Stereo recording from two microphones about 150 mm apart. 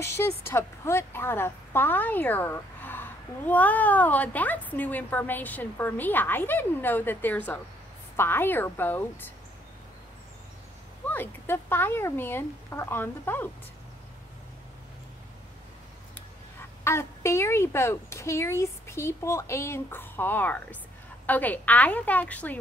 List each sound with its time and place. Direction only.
0.0 s a woman's voice: 15° left (ahead or behind)
11.1 s a woman's voice: 15° left (ahead or behind)
16.8 s a woman's voice: 15° left (ahead or behind)